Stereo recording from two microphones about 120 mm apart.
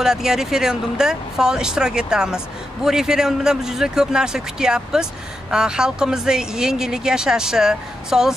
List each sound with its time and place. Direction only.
0.0 s speech: 5° right (ahead or behind)